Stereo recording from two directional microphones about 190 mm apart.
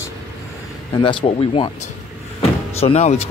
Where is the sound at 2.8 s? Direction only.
35° left (ahead or behind).